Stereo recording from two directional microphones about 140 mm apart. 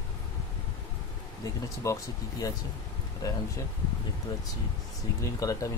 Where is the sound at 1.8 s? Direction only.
25° left (ahead or behind).